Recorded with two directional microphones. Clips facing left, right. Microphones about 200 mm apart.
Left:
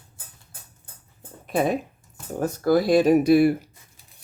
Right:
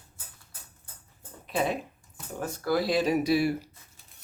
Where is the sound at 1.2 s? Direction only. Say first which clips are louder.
Left 5 dB; 50° left (ahead or behind).